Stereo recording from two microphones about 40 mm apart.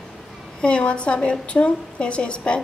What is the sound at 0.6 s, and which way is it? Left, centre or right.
A woman's voice, left.